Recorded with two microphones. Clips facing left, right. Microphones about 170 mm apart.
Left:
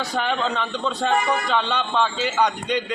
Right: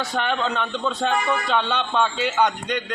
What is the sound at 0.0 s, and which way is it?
A man's voice, centre (ahead or behind).